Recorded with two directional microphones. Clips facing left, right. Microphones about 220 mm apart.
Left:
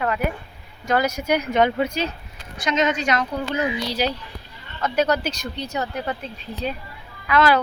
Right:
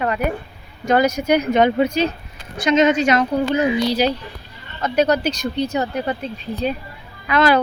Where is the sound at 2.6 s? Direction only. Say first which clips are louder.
Right 7 dB; centre (ahead or behind).